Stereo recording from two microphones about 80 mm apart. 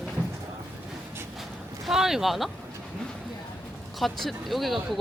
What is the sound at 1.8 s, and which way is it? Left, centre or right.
Speech, centre.